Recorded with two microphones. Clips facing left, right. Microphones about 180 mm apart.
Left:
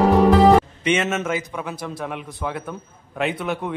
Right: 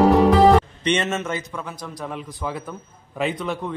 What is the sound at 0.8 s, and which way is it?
Speech, 5° left (ahead or behind).